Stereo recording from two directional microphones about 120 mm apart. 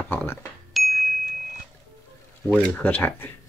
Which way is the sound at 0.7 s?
Centre (ahead or behind).